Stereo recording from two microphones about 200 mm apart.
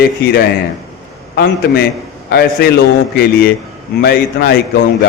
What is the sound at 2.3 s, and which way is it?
A man's voice, 55° left (ahead or behind).